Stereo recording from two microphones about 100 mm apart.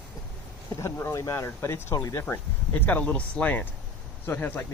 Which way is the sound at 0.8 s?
25° left (ahead or behind).